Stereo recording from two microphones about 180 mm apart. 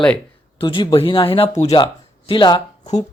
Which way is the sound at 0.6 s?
25° left (ahead or behind).